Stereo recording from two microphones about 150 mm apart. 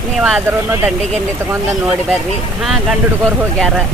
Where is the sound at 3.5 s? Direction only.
Centre (ahead or behind).